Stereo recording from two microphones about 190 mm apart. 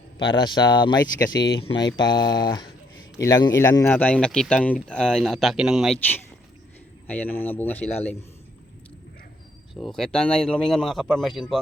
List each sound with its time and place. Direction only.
0.2 s speech: 25° left (ahead or behind); by 6.0 s centre (ahead or behind)
7.1 s speech: 10° left (ahead or behind)
9.7 s speech: centre (ahead or behind)